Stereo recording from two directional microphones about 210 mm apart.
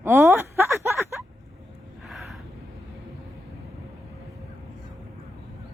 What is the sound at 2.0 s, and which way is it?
Gasp, centre (ahead or behind).